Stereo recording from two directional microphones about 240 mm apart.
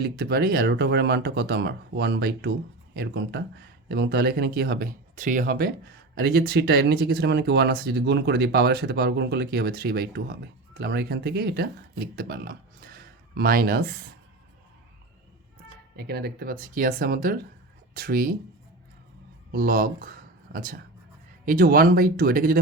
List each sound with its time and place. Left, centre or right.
0.0 s speech: right
16.0 s speech: right
19.5 s speech: right